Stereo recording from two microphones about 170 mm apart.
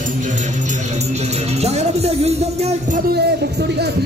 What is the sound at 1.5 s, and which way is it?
Music, 40° right (ahead or behind).